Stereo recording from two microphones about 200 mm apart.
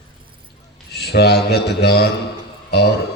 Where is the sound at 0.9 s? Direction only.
55° left (ahead or behind).